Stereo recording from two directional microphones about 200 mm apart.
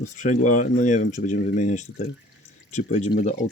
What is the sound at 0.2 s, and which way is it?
Speech, 40° left (ahead or behind).